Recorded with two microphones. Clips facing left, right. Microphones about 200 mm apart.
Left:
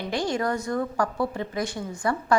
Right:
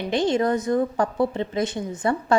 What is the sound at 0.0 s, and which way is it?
A woman's voice, 20° right (ahead or behind).